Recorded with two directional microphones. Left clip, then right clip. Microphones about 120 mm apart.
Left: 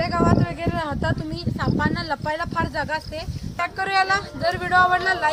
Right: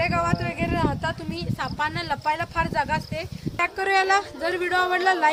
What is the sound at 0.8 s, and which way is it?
Speech, 80° right.